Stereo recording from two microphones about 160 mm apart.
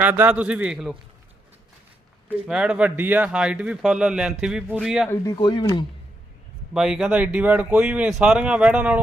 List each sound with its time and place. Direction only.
0.0 s speech: 10° right (ahead or behind)
2.3 s speech: 5° right (ahead or behind)
5.0 s speech: 15° left (ahead or behind)
5.3 s speech: 30° left (ahead or behind)
6.7 s speech: 5° right (ahead or behind)